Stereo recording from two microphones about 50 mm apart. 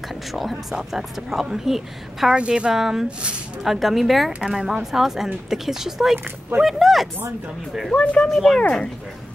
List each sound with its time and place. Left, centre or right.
0.3 s speech: centre
2.3 s a woman's voice: centre
2.7 s speech: centre
7.9 s speech: left
8.3 s speech: centre
8.5 s speech: centre